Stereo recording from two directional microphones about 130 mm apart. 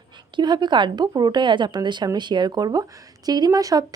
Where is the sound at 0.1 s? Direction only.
35° right (ahead or behind).